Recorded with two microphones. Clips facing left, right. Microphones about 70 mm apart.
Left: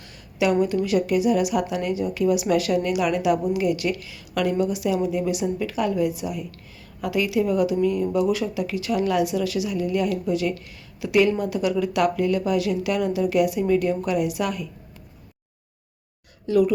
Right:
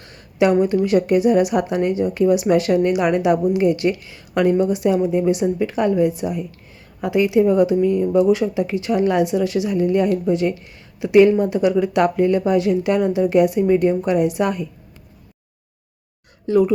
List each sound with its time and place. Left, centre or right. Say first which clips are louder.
0.0 s a sound: right 6 dB; right
0.5 s speech: right 3 dB; right
16.5 s speech: right 3 dB; right